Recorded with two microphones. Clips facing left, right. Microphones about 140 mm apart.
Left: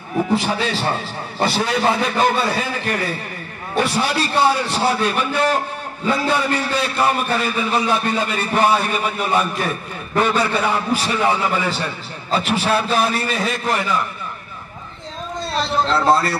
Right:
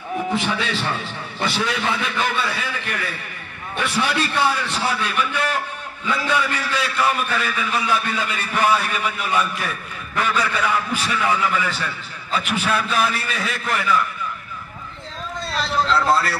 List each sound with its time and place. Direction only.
0.3 s a man's voice: 35° left (ahead or behind)
15.5 s a man's voice: 25° left (ahead or behind)